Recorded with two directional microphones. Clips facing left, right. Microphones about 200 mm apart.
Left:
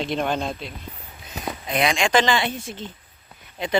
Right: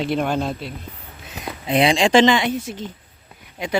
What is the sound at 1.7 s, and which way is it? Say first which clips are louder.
Speech: right 5 dB; 30° right (ahead or behind).